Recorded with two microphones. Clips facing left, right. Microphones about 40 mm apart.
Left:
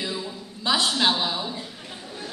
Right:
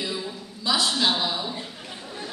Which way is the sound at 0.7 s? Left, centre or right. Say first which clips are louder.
Left 1 dB; left.